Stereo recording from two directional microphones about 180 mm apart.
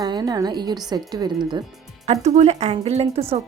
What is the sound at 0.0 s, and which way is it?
A woman's voice, 25° right (ahead or behind).